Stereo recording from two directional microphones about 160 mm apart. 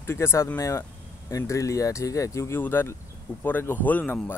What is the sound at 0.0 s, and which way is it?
Speech, 15° left (ahead or behind).